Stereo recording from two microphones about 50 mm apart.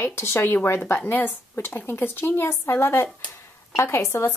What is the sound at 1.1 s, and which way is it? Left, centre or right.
A woman's voice, left.